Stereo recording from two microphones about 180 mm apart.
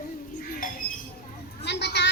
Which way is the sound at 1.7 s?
70° left (ahead or behind).